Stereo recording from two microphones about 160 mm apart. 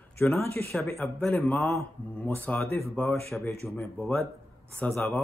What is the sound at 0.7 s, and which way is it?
Speech, 15° left (ahead or behind).